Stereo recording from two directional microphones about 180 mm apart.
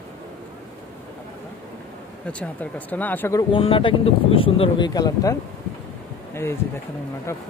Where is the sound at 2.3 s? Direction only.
5° left (ahead or behind).